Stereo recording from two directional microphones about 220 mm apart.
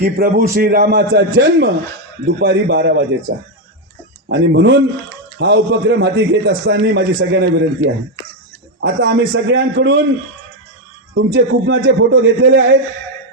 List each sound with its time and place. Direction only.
0.0 s a man's voice: 40° right (ahead or behind)
4.3 s a man's voice: 50° right (ahead or behind)
11.1 s a man's voice: 50° right (ahead or behind)